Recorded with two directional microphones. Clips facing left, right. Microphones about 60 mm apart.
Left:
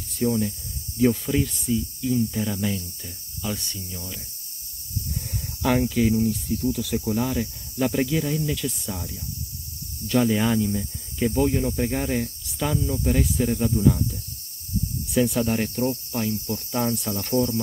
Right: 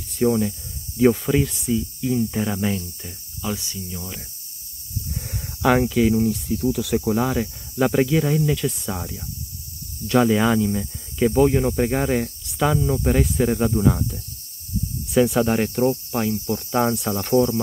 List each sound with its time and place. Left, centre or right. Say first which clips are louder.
0.2 s speech: right 4 dB; right
2.3 s speech: right 3 dB; right
3.4 s cricket: right 3 dB; centre
5.6 s speech: right 4 dB; right
6.1 s speech: right 2 dB; right
15.1 s cricket: right 4 dB; right
16.5 s speech: right 6 dB; right